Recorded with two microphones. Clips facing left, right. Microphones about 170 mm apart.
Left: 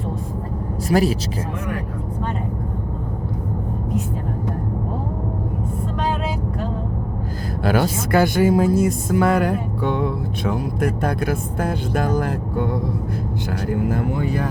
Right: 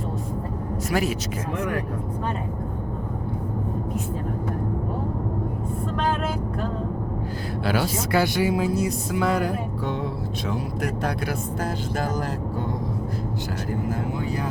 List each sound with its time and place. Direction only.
0.9 s speech: 35° left (ahead or behind)
7.6 s speech: 50° left (ahead or behind)
13.9 s speech: 60° left (ahead or behind)